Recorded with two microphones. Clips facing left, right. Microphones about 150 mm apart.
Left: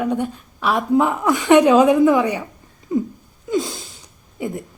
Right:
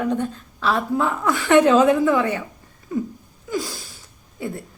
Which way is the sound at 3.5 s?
20° left (ahead or behind).